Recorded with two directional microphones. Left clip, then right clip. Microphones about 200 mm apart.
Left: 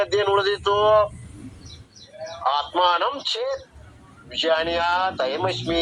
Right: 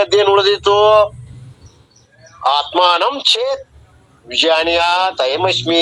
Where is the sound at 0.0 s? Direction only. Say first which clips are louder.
Right 8 dB; 35° right (ahead or behind).